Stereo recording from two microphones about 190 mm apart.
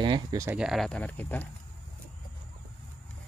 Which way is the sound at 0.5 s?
Centre (ahead or behind).